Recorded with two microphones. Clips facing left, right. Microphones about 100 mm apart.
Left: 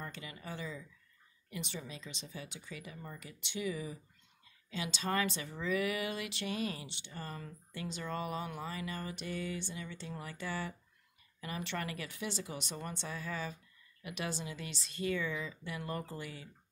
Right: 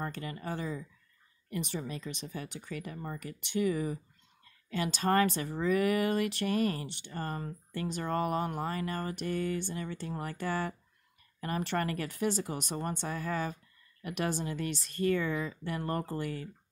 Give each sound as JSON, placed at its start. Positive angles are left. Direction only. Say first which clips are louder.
{"t": 0.0, "sound": "a woman's voice", "louder": "right 8 dB", "side_deg": -45}